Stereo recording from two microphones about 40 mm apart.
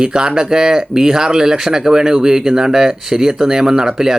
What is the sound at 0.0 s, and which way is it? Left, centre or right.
Speech, right.